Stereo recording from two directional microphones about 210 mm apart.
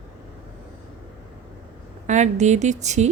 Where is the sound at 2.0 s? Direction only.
35° right (ahead or behind).